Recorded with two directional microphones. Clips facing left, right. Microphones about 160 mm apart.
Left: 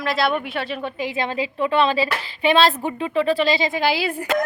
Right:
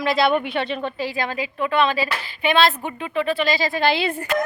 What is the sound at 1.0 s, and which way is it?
A woman's voice, 20° left (ahead or behind).